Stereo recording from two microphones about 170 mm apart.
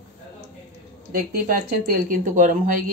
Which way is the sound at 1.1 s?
60° right (ahead or behind).